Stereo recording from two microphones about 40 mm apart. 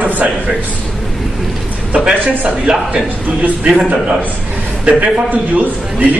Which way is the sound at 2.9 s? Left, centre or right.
Right.